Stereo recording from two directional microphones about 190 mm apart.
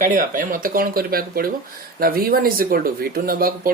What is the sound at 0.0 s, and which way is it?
Speech, 45° right (ahead or behind).